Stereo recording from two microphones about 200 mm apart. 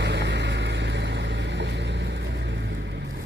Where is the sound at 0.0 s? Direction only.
60° right (ahead or behind).